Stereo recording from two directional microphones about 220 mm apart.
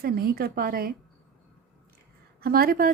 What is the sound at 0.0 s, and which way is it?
Speech, 45° right (ahead or behind).